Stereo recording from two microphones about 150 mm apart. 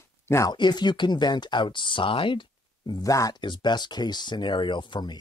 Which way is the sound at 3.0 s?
20° left (ahead or behind).